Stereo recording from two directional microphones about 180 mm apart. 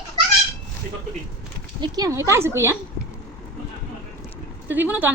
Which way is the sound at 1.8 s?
20° right (ahead or behind).